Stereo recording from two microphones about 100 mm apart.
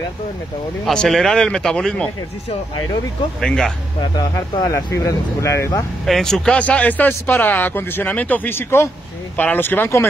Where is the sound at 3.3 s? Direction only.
5° left (ahead or behind).